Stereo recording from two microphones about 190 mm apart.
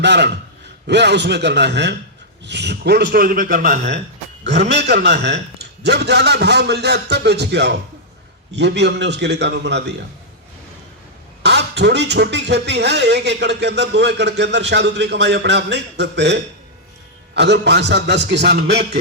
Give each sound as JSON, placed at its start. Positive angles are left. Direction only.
{"t": 0.0, "sound": "a man's voice", "side_deg": -65}
{"t": 4.9, "sound": "speech", "side_deg": -60}
{"t": 11.4, "sound": "speech", "side_deg": -65}